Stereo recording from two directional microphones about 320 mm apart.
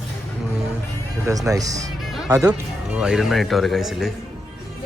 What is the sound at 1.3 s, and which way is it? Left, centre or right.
Speech, centre.